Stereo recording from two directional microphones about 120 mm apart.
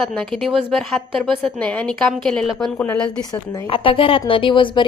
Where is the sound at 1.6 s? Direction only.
10° left (ahead or behind).